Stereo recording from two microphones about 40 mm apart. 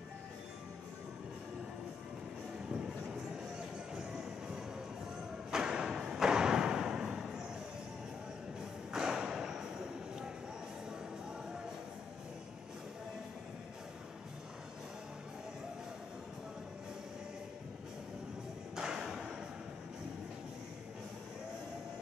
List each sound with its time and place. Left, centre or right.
3.1 s music: centre
5.5 s thump: centre
8.5 s thump: centre
18.8 s thump: centre